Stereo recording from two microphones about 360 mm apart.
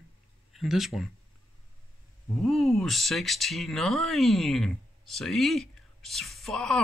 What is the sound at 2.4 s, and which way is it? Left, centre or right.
Speech, centre.